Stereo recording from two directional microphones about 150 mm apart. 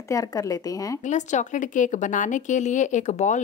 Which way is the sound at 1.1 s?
55° left (ahead or behind).